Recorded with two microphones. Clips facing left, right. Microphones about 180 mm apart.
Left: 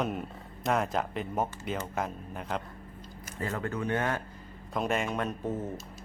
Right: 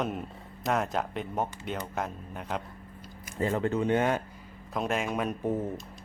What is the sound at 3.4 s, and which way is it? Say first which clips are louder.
Speech: right 6 dB; 25° right (ahead or behind).